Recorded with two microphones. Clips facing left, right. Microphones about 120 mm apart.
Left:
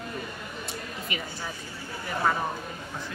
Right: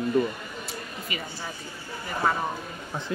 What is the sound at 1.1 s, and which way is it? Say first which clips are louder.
Speech: even; centre (ahead or behind).